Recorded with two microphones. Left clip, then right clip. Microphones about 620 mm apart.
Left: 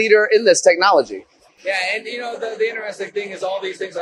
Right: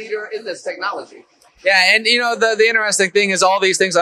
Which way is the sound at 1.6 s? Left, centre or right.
Right.